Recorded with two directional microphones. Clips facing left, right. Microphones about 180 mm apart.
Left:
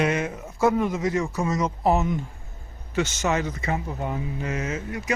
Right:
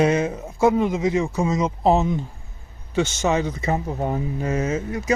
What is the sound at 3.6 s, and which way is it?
Speech, 35° right (ahead or behind).